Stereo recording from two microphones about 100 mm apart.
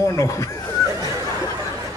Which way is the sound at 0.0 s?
30° left (ahead or behind).